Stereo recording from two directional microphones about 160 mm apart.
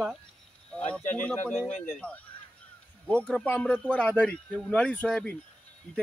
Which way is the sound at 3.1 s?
5° left (ahead or behind).